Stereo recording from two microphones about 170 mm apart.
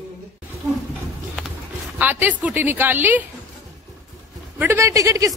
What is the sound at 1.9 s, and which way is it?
A woman's voice, 10° right (ahead or behind).